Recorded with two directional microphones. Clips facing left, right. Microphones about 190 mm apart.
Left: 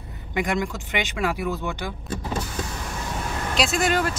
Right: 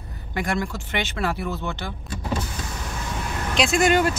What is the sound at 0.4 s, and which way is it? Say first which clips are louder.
Speech: left 1 dB; 15° left (ahead or behind).